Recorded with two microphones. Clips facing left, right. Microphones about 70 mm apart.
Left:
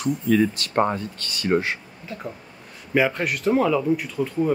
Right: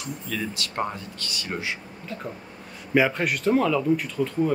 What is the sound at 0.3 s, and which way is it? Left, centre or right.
Speech, left.